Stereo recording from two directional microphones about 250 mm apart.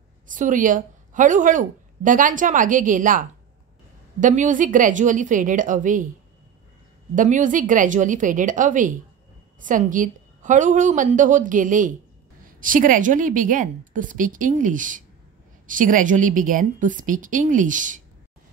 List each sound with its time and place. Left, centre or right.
0.3 s a woman's voice: right
7.2 s a woman's voice: right